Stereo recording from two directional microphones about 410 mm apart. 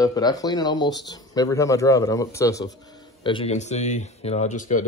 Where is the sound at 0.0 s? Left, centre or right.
Centre.